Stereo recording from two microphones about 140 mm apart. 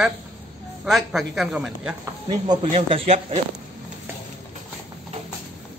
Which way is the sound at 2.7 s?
45° right (ahead or behind).